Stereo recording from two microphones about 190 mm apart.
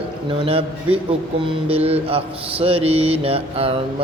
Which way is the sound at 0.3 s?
30° right (ahead or behind).